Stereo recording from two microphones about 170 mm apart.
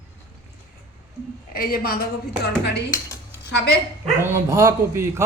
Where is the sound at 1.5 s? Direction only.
60° left (ahead or behind).